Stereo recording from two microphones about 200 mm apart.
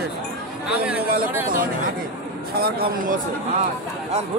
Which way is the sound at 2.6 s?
50° right (ahead or behind).